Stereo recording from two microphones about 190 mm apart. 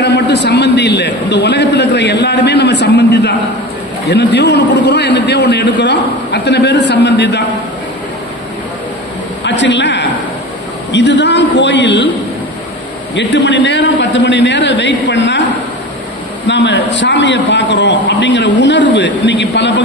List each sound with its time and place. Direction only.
0.0 s a man's voice: 65° left (ahead or behind)
9.4 s a man's voice: 70° left (ahead or behind)
13.1 s a man's voice: 65° left (ahead or behind)
16.4 s a man's voice: 65° left (ahead or behind)